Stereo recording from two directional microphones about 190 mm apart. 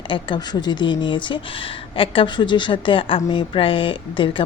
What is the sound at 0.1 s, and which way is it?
Speech, 25° left (ahead or behind).